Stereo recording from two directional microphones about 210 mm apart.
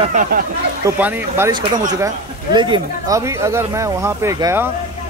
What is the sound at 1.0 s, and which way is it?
Speech, 10° right (ahead or behind).